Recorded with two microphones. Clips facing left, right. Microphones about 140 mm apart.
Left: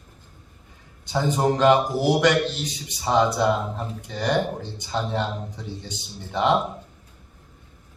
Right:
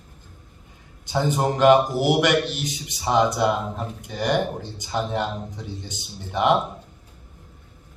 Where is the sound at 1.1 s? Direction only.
20° right (ahead or behind).